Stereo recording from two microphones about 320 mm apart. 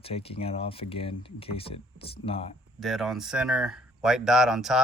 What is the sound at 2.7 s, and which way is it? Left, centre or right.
Speech, centre.